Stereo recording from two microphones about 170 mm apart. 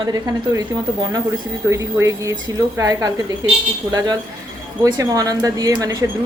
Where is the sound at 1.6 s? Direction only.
15° right (ahead or behind).